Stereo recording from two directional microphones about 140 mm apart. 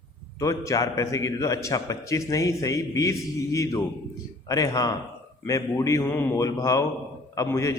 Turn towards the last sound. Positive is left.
turn(degrees=20)  # may be behind; listen again after turning